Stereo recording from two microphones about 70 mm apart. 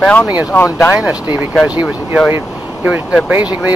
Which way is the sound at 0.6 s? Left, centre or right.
Left.